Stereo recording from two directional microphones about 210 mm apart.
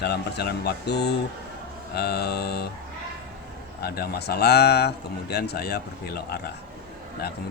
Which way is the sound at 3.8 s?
50° left (ahead or behind).